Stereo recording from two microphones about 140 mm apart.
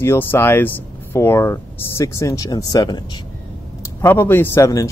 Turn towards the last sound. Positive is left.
turn(degrees=20)  # may be behind; listen again after turning